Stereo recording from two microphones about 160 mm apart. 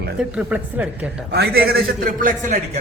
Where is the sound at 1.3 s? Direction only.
85° right; by 2.6 s 55° right (ahead or behind).